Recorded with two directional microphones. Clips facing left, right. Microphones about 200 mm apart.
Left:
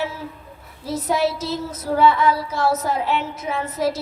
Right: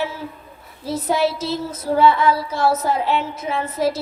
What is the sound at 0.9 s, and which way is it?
Child singing, 30° right (ahead or behind).